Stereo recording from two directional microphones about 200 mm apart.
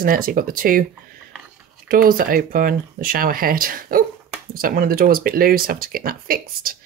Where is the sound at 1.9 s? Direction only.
45° right (ahead or behind).